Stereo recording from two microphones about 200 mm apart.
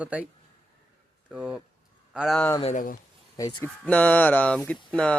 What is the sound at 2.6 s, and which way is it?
Speech, 30° left (ahead or behind).